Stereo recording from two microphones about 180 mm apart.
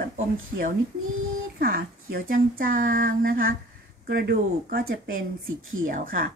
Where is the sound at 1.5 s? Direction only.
55° right (ahead or behind).